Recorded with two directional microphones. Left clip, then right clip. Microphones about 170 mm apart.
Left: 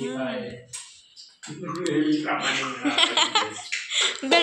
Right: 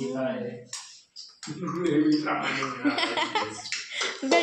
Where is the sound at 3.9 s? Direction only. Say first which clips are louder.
Left 4 dB; 15° right (ahead or behind).